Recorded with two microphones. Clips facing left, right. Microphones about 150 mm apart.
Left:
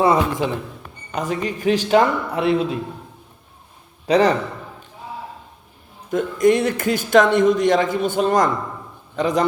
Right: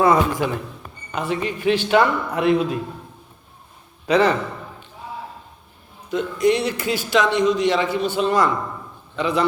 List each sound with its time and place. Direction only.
0.0 s a man's voice: 25° left (ahead or behind)
1.1 s a man's voice: 40° left (ahead or behind)
4.0 s a man's voice: 35° left (ahead or behind)
6.1 s a man's voice: 45° left (ahead or behind)